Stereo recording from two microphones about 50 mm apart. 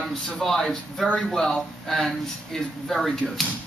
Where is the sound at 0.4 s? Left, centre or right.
Centre.